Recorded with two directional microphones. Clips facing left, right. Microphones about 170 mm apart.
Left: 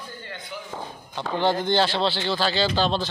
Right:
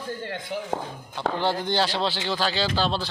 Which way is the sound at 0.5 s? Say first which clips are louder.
Right 6 dB; 60° right (ahead or behind).